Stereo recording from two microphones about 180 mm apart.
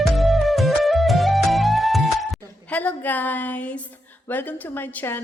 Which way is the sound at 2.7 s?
10° left (ahead or behind).